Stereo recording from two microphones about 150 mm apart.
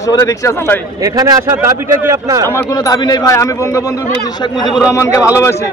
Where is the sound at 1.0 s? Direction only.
25° right (ahead or behind).